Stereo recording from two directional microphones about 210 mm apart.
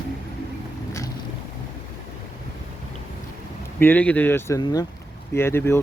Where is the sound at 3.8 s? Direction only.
10° left (ahead or behind).